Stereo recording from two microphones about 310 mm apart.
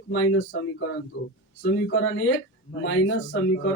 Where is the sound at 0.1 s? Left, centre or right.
Left.